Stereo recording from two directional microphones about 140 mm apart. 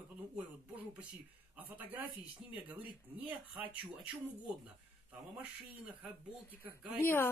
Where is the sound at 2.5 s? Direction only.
10° right (ahead or behind).